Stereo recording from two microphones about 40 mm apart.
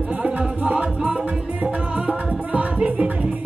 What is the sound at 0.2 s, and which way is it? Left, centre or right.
Music, right.